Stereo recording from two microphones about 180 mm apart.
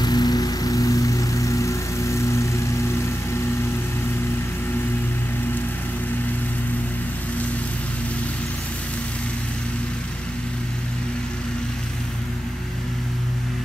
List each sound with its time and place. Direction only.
0.0 s vehicle: 20° left (ahead or behind)